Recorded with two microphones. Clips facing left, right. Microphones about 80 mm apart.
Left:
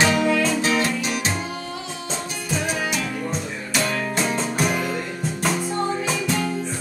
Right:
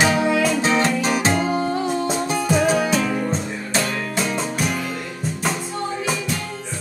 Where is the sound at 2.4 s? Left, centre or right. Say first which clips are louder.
Right 7 dB; right.